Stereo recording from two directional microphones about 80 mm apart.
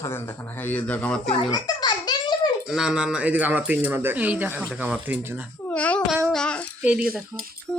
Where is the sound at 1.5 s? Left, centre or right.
Left.